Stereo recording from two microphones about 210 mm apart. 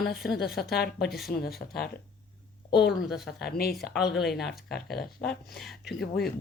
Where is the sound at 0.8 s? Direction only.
50° left (ahead or behind).